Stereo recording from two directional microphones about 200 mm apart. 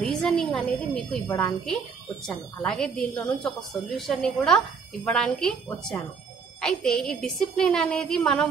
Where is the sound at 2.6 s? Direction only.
5° left (ahead or behind).